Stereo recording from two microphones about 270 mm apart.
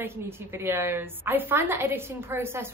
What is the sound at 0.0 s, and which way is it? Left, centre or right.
A woman's voice, centre.